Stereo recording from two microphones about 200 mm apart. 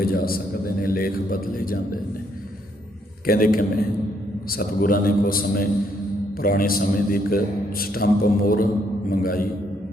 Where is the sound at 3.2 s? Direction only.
45° left (ahead or behind).